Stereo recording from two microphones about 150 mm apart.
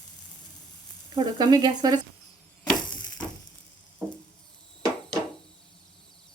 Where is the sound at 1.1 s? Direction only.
30° right (ahead or behind).